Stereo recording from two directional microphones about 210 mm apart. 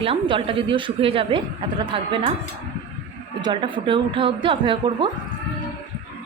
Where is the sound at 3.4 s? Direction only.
20° right (ahead or behind).